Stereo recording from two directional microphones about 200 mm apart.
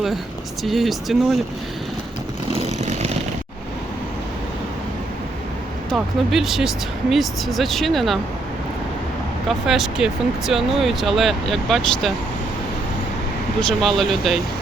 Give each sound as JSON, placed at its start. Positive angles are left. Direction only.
{"t": 0.6, "sound": "speech", "side_deg": 0}
{"t": 2.5, "sound": "vehicle", "side_deg": -30}
{"t": 5.9, "sound": "speech", "side_deg": 0}
{"t": 9.5, "sound": "speech", "side_deg": 0}
{"t": 13.6, "sound": "speech", "side_deg": 0}